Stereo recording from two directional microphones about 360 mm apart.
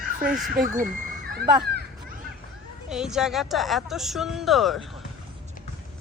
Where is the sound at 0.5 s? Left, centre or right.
Right.